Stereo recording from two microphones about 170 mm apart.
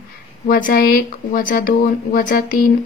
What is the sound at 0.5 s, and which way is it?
Speech, 55° left (ahead or behind).